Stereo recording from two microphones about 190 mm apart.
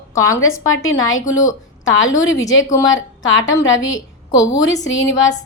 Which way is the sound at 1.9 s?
90° left.